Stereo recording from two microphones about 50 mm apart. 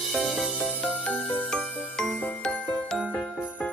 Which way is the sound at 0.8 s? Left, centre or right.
Left.